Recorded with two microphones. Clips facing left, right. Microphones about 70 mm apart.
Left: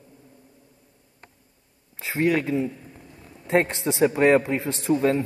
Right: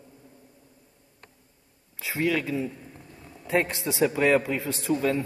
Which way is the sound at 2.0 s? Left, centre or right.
Left.